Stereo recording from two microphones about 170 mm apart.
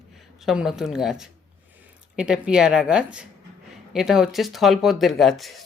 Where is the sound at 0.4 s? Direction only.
5° right (ahead or behind).